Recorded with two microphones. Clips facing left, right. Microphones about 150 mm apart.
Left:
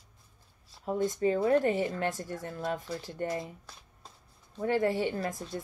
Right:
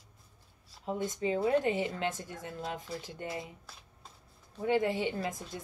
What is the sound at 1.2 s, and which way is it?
Speech, 45° left (ahead or behind).